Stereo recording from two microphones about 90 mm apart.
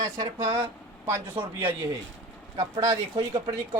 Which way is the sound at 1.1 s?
30° right (ahead or behind).